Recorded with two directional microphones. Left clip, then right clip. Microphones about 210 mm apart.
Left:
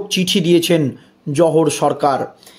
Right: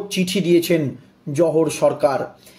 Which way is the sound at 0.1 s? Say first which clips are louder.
Left 3 dB; 35° left (ahead or behind).